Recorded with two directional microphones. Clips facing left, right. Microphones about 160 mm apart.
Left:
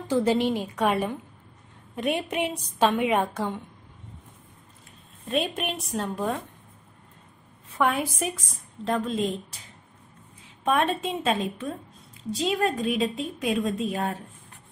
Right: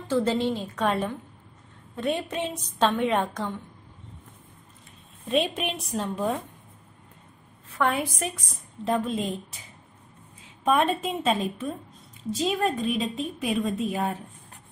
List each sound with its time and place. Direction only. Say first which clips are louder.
0.1 s a woman's voice: left 2 dB; 15° left (ahead or behind)
5.3 s a woman's voice: right 2 dB; centre (ahead or behind)
7.8 s a woman's voice: left 1 dB; 5° left (ahead or behind)
10.6 s a woman's voice: right 1 dB; centre (ahead or behind)